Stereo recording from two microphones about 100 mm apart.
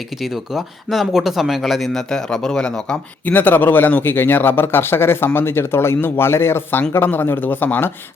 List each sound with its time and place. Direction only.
0.2 s speech: centre (ahead or behind); by 7.9 s 20° left (ahead or behind)